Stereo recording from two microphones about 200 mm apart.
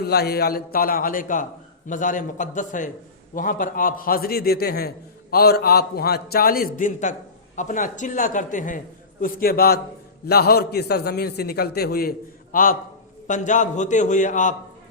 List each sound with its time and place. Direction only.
0.0 s a man's voice: 55° left (ahead or behind)